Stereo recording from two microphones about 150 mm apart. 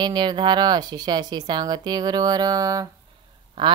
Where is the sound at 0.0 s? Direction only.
30° right (ahead or behind).